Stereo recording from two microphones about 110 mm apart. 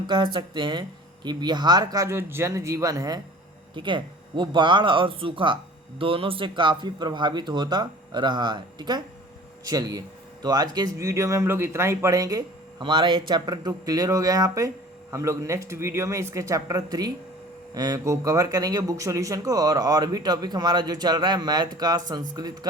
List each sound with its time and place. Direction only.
0.1 s speech: 45° right (ahead or behind)
2.0 s speech: 20° right (ahead or behind)
3.8 s speech: 50° right (ahead or behind); by 12.4 s 30° right (ahead or behind)
12.8 s speech: 45° right (ahead or behind)